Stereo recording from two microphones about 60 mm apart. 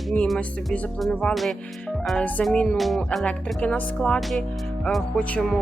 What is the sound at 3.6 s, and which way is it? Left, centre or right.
Speech, left.